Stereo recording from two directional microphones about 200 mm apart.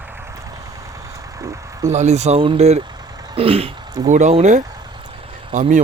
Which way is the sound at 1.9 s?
35° right (ahead or behind).